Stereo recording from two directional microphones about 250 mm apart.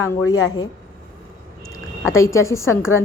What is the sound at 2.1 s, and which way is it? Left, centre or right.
Speech, centre.